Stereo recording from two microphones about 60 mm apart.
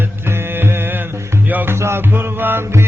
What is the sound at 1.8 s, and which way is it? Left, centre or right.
Music, right.